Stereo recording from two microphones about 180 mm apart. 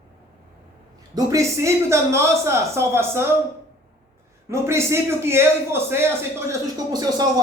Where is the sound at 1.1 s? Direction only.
15° right (ahead or behind).